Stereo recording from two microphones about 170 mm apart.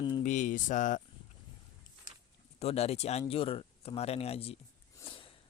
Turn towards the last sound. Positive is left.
turn(degrees=30)  # may be behind; listen again after turning